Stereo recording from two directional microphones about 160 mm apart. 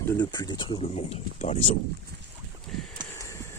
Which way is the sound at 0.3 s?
25° left (ahead or behind).